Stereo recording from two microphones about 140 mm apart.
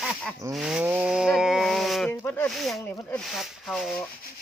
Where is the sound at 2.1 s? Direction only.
10° left (ahead or behind).